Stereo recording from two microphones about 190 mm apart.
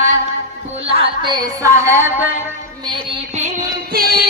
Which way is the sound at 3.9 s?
50° right (ahead or behind).